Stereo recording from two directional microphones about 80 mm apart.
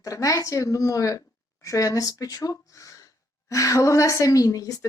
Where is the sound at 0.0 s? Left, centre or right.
Left.